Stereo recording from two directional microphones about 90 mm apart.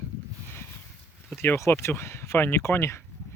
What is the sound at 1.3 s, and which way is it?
Speech, 25° left (ahead or behind).